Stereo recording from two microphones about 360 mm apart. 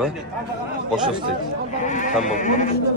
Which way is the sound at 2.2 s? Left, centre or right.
Left.